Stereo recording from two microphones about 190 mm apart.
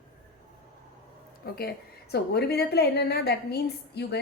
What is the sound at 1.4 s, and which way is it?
A woman's voice, 55° left (ahead or behind).